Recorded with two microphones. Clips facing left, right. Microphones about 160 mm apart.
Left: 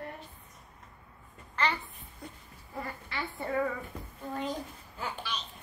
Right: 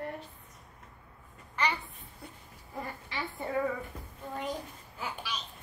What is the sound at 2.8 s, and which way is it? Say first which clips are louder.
Speech: even; 20° right (ahead or behind).